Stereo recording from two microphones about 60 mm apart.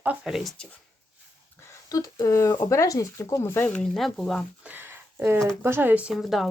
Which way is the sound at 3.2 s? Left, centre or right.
Left.